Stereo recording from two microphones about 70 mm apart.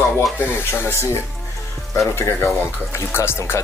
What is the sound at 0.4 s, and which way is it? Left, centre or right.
Speech, left.